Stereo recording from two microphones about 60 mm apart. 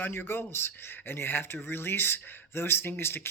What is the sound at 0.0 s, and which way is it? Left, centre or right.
Speech, left.